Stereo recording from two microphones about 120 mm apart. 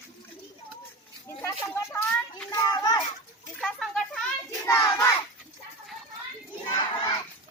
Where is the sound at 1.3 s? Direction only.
20° left (ahead or behind).